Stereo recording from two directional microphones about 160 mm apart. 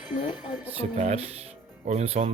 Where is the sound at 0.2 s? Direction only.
25° left (ahead or behind).